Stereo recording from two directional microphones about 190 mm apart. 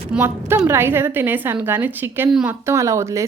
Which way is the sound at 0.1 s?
10° right (ahead or behind).